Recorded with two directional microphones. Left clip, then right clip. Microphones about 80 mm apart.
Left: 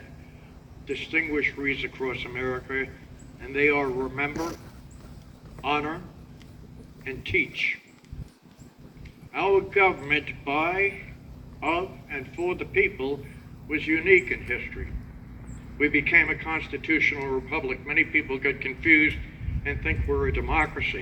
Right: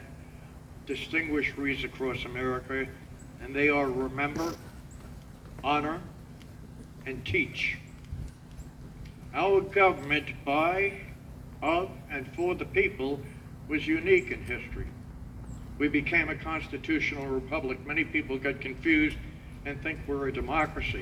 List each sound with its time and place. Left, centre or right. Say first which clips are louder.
0.9 s speech: left 4 dB; right
4.4 s speech: left 1 dB; centre
5.6 s speech: left 1 dB; right
7.0 s a man's voice: left 4 dB; right
9.3 s a man's voice: left 3 dB; right
15.8 s speech: left 6 dB; right